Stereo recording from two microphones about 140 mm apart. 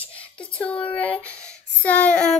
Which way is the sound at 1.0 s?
10° left (ahead or behind).